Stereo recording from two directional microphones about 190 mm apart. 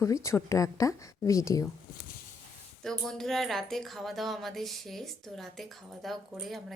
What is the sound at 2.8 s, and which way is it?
Speech, centre (ahead or behind).